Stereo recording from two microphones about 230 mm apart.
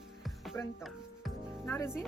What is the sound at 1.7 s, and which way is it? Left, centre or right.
Speech, centre.